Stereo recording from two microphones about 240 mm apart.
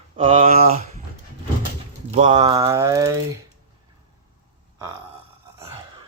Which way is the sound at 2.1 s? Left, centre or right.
Right.